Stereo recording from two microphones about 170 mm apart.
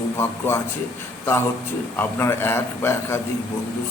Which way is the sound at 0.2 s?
15° left (ahead or behind).